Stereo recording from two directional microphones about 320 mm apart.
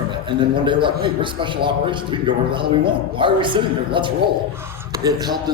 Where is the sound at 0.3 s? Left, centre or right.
Centre.